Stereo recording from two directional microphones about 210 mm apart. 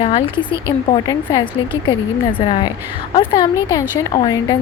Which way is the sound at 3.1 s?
25° left (ahead or behind).